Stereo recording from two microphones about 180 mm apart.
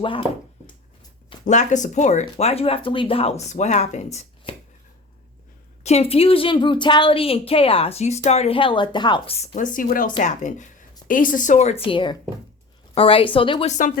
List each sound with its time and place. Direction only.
0.0 s speech: 30° left (ahead or behind)
1.5 s a woman's voice: 45° left (ahead or behind)
5.8 s a woman's voice: 35° left (ahead or behind)